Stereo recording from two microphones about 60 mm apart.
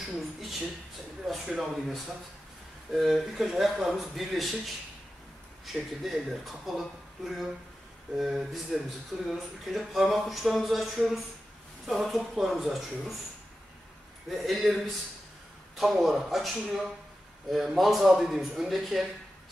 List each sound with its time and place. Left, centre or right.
0.0 s speech: centre
14.4 s speech: centre